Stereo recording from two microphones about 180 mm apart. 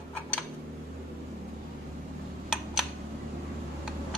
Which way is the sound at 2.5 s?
Centre (ahead or behind).